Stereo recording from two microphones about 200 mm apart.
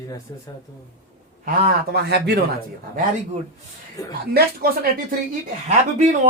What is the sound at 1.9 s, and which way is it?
Speech, 55° right (ahead or behind).